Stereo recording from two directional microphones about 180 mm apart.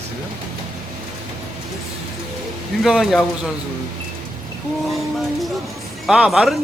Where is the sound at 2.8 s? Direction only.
Centre (ahead or behind).